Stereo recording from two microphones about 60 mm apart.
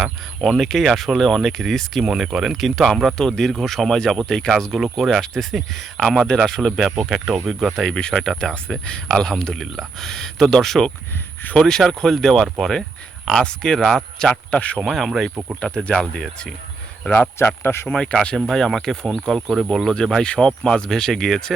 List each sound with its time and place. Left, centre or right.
0.0 s speech: centre
4.8 s speech: centre
7.8 s speech: centre
14.9 s speech: centre
15.6 s speech: centre
17.4 s speech: left
17.8 s speech: centre
19.9 s speech: centre